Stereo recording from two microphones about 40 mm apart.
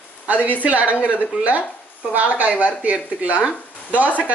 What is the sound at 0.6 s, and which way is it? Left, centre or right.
Speech, right.